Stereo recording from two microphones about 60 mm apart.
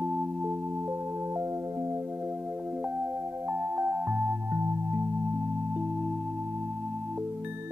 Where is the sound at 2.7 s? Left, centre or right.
Right.